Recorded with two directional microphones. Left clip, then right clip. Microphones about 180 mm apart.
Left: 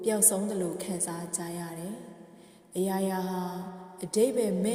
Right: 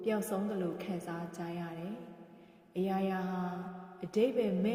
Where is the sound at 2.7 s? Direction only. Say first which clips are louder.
Left 4 dB; 30° left (ahead or behind).